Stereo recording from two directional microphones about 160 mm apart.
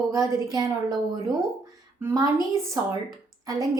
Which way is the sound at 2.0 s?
20° right (ahead or behind).